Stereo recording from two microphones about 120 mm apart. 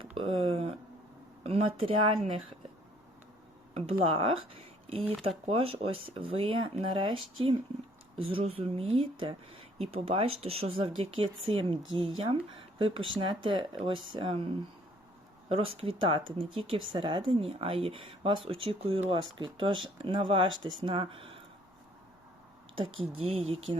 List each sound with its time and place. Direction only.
0.0 s a sound: 50° right (ahead or behind)
1.5 s speech: 55° right (ahead or behind)
3.8 s speech: 50° right (ahead or behind)
8.3 s speech: 50° right (ahead or behind)
15.4 s speech: 50° right (ahead or behind)
22.7 s speech: 45° right (ahead or behind)